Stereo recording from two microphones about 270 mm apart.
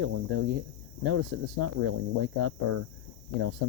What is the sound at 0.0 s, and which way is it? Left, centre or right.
Cricket, right.